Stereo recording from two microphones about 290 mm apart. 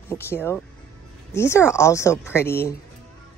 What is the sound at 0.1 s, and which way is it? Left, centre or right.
Speech, centre.